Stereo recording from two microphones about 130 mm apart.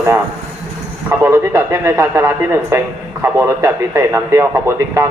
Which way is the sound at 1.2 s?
20° right (ahead or behind).